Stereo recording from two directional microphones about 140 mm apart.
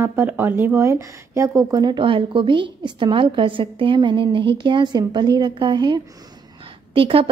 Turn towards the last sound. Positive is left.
turn(degrees=-40)  # may be behind; listen again after turning